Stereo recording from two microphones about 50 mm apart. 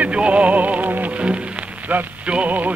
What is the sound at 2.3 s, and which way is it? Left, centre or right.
Music, right.